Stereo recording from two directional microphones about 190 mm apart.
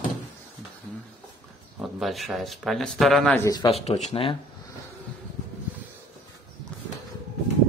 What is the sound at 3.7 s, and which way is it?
Speech, 35° left (ahead or behind).